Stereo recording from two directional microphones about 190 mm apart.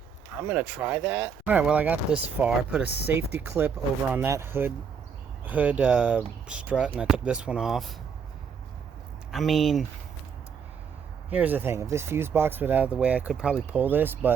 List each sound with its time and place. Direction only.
0.3 s speech: 10° right (ahead or behind)
9.3 s speech: centre (ahead or behind)
11.3 s speech: 10° right (ahead or behind)